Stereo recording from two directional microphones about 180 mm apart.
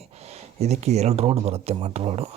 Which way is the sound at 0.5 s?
35° right (ahead or behind).